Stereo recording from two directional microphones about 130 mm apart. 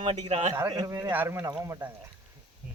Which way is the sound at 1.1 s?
20° right (ahead or behind).